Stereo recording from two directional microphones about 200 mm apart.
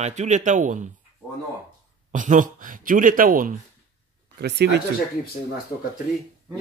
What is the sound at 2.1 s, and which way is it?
Speech, 40° right (ahead or behind).